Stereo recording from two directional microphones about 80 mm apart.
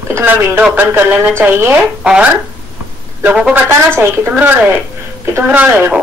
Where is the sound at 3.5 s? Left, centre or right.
Right.